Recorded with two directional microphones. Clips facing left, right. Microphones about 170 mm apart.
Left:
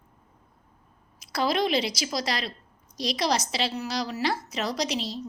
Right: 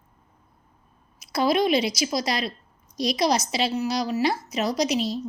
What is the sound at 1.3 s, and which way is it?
A woman's voice, 15° right (ahead or behind).